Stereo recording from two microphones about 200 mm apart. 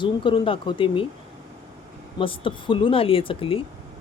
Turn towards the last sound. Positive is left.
turn(degrees=25)  # may be behind; listen again after turning